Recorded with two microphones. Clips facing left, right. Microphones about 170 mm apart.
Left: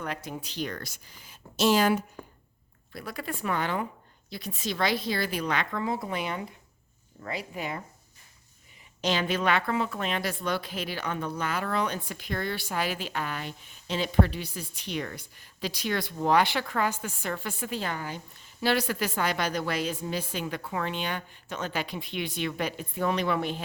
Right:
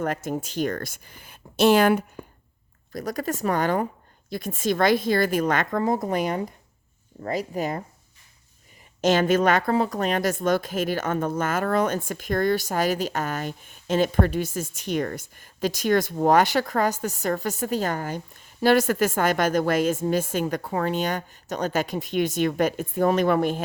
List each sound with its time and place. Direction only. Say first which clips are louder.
0.0 s a woman's voice: right 8 dB; 45° right (ahead or behind)
2.9 s a woman's voice: right 8 dB; 40° right (ahead or behind)
9.0 s a woman's voice: right 8 dB; 45° right (ahead or behind)